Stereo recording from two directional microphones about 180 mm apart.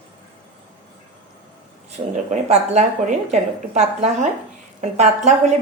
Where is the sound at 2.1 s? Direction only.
40° right (ahead or behind).